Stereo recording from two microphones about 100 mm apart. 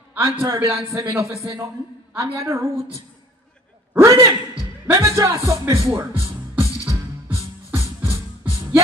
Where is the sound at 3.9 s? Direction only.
30° right (ahead or behind).